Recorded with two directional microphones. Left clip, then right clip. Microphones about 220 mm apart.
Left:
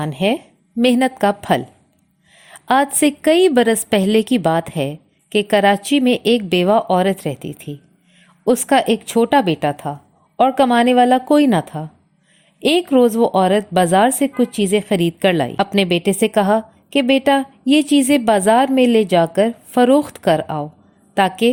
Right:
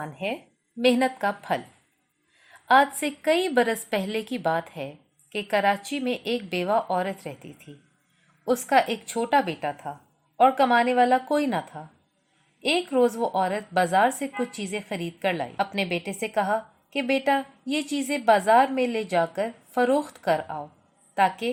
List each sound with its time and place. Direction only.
0.0 s a woman's voice: 40° left (ahead or behind)